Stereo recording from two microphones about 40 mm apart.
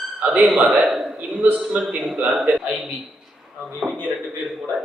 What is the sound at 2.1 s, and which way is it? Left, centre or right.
Speech, right.